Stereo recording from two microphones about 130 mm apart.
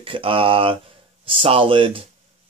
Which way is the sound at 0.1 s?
45° right (ahead or behind).